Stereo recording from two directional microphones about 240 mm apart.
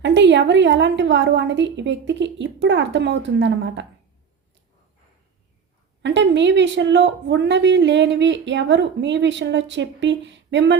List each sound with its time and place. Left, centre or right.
0.0 s speech: right
6.0 s speech: right